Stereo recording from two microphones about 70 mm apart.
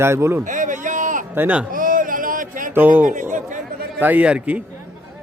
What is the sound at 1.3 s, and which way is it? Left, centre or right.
Speech, right.